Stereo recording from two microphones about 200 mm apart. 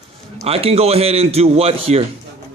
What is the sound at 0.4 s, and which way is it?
A man's voice, 30° right (ahead or behind).